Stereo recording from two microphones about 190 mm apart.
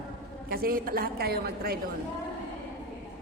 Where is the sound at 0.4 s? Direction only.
50° right (ahead or behind).